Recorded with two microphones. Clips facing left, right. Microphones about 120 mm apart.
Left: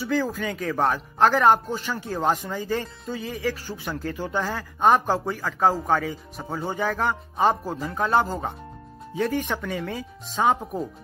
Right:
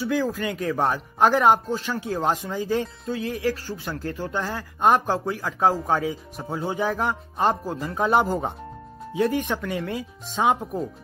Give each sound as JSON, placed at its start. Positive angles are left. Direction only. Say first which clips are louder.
{"t": 0.0, "sound": "speech", "louder": "right 1 dB", "side_deg": 0}
{"t": 8.1, "sound": "speech", "louder": "right 2 dB", "side_deg": -20}
{"t": 9.1, "sound": "speech", "louder": "right 2 dB", "side_deg": 0}